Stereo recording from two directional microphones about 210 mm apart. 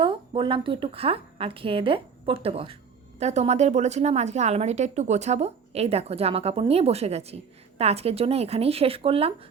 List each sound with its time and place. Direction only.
0.0 s a woman's voice: 25° right (ahead or behind)